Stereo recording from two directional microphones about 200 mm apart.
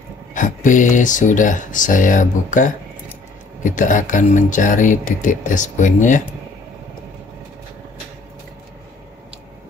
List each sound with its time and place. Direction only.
0.3 s speech: 40° left (ahead or behind)